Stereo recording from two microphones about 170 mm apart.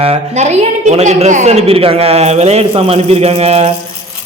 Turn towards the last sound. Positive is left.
turn(degrees=-40)  # may be behind; listen again after turning